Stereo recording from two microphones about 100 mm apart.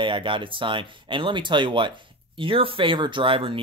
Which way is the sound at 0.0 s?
55° right (ahead or behind).